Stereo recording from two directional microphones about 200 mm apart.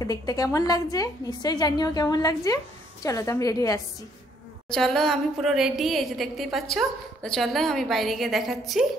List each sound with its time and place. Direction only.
0.0 s a woman's voice: 20° left (ahead or behind)
4.6 s a woman's voice: 5° left (ahead or behind)